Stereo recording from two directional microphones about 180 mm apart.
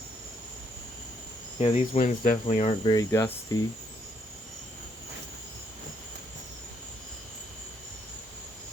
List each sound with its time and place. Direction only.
1.5 s cricket: 35° left (ahead or behind)
2.5 s cricket: 35° left (ahead or behind)
2.9 s speech: 15° left (ahead or behind)